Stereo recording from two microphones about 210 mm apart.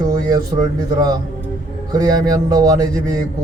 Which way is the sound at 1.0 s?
20° right (ahead or behind).